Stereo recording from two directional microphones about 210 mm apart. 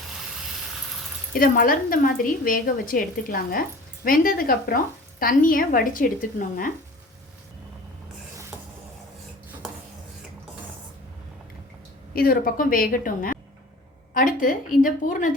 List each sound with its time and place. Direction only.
1.3 s a woman's voice: 40° left (ahead or behind)
12.1 s a woman's voice: 45° left (ahead or behind)